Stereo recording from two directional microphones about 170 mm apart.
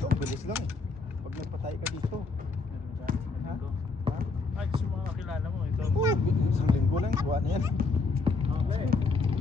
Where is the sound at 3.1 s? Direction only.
55° right (ahead or behind).